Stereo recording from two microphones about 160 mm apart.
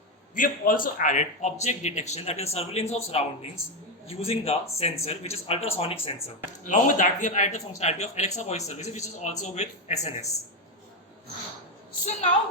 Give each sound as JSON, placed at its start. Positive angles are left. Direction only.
{"t": 0.3, "sound": "speech", "side_deg": 60}
{"t": 6.2, "sound": "speech", "side_deg": 55}
{"t": 12.0, "sound": "speech", "side_deg": 45}